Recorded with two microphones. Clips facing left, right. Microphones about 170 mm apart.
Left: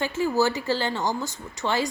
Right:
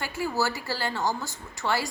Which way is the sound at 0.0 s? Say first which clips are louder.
Left 5 dB; 20° left (ahead or behind).